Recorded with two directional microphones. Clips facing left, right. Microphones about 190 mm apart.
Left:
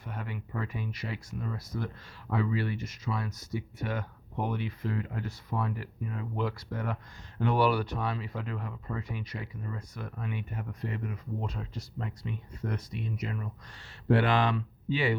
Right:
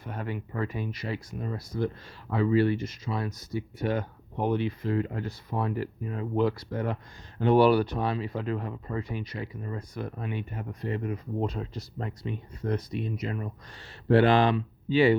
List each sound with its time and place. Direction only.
0.2 s speech: 35° right (ahead or behind)